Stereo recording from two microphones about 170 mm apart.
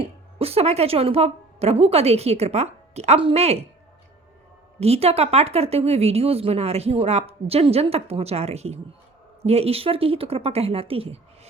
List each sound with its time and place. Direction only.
0.0 s a woman's voice: 35° right (ahead or behind)
4.8 s speech: 35° right (ahead or behind)